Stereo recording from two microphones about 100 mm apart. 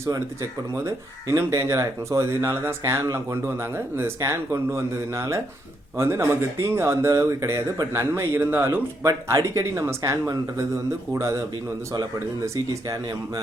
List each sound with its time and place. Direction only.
0.9 s speech: 30° right (ahead or behind)